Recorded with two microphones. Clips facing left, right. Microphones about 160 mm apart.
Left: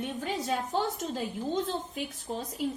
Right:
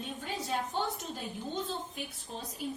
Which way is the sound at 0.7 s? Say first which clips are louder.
Left 5 dB; 90° left.